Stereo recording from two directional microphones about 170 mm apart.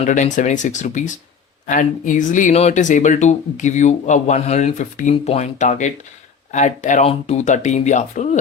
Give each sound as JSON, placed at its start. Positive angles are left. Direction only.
{"t": 0.1, "sound": "speech", "side_deg": 45}